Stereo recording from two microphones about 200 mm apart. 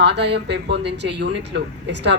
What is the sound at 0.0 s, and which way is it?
Speech, 60° right (ahead or behind).